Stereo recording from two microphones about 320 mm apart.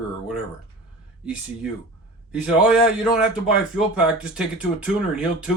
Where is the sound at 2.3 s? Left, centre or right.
Centre.